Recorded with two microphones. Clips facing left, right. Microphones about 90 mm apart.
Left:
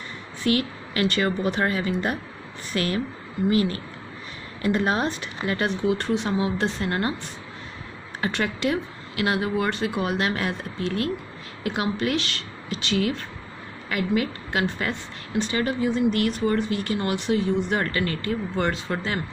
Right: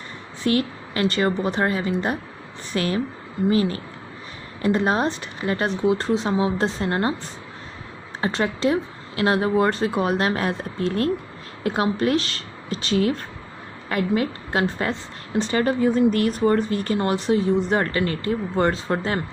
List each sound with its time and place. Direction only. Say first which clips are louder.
0.4 s a woman's voice: right 2 dB; 30° right (ahead or behind)
8.2 s a woman's voice: right 3 dB; 30° right (ahead or behind)